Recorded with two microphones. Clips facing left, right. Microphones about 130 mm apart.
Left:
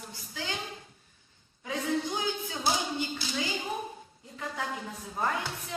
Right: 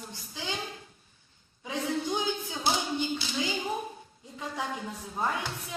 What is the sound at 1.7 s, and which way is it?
A woman's voice, 20° right (ahead or behind).